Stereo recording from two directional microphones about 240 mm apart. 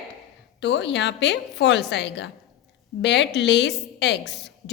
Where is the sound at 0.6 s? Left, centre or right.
Left.